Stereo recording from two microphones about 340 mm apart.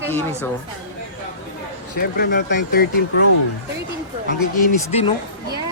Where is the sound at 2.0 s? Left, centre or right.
Left.